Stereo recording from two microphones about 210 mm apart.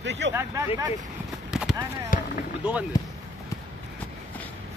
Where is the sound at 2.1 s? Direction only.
40° left (ahead or behind).